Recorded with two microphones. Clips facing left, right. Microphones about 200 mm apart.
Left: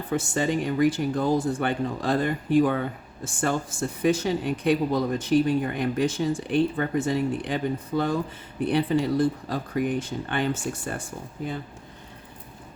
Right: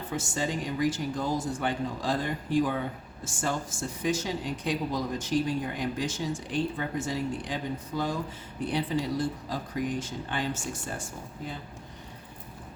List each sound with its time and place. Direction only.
0.1 s speech: 60° left (ahead or behind)